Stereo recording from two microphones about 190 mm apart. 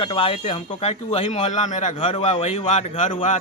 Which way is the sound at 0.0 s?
25° left (ahead or behind).